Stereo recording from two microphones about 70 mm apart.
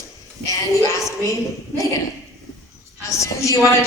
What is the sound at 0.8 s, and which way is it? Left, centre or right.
Music, left.